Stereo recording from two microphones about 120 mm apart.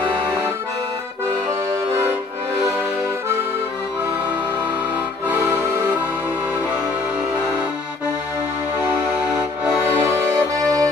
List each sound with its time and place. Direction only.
5.3 s accordion: 15° right (ahead or behind)
9.3 s music: 5° right (ahead or behind)
9.9 s music: 25° right (ahead or behind)